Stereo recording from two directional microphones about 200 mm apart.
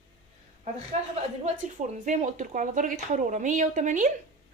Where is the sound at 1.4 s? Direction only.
40° right (ahead or behind).